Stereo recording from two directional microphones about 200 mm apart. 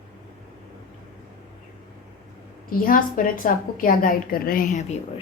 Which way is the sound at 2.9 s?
45° left (ahead or behind).